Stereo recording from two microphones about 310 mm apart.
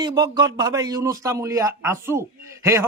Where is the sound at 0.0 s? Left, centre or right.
Centre.